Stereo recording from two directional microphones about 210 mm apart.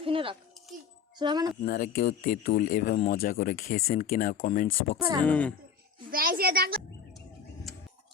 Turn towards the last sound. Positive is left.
turn(degrees=-45)  # may be behind; listen again after turning